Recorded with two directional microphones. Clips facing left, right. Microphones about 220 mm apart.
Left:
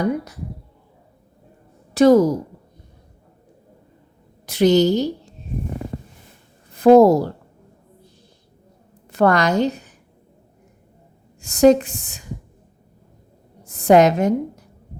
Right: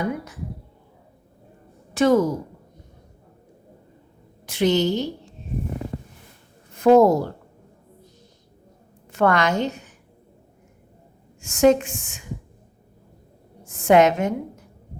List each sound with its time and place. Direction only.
1.9 s a woman's voice: 35° left (ahead or behind)
4.4 s a woman's voice: 40° left (ahead or behind)
6.7 s a woman's voice: 35° left (ahead or behind)
9.1 s a woman's voice: 35° left (ahead or behind)
11.3 s speech: 35° left (ahead or behind)
13.7 s a woman's voice: 35° left (ahead or behind)